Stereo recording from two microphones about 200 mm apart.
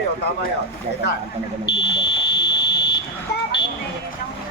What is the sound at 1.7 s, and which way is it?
Buzzer, 55° left (ahead or behind).